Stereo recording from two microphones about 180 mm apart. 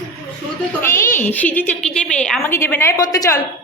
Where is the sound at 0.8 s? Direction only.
15° left (ahead or behind).